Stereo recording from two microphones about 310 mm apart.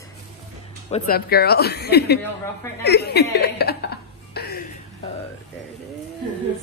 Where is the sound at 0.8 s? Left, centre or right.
Left.